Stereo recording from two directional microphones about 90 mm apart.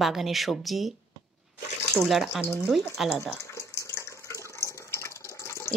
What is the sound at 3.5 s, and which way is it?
Water, 35° left (ahead or behind).